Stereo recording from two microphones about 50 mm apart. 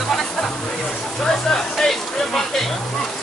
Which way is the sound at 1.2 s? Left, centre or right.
Centre.